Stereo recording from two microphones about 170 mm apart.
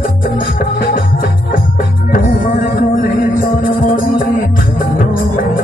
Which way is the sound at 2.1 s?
55° left (ahead or behind).